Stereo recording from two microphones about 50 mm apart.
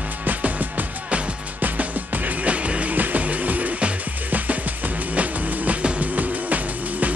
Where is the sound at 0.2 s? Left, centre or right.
Right.